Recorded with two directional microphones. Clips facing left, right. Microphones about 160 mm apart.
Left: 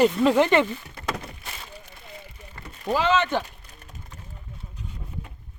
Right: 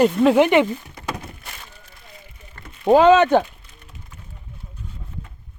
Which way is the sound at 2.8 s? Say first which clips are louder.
Right 10 dB; 55° right (ahead or behind).